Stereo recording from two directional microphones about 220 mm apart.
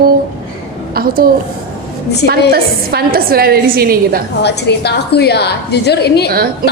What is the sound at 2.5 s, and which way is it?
A woman's voice, 45° right (ahead or behind).